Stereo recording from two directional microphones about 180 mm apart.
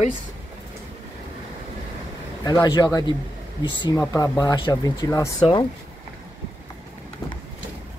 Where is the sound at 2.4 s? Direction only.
20° left (ahead or behind).